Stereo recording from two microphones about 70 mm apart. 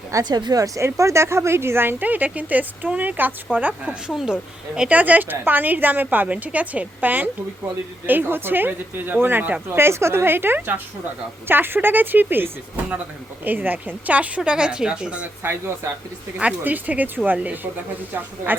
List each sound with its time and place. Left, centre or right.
0.3 s a woman's voice: right
0.8 s a woman's voice: right
4.1 s speech: centre
4.9 s a woman's voice: right
9.7 s a woman's voice: right; by 15.3 s centre
15.4 s a woman's voice: right
16.4 s a woman's voice: right